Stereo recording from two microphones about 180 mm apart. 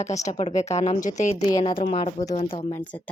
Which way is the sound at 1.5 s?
25° left (ahead or behind).